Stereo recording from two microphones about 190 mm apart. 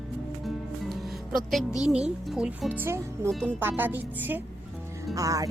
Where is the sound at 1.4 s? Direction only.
Centre (ahead or behind).